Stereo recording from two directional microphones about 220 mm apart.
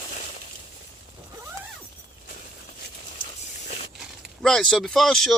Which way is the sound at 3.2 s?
30° left (ahead or behind).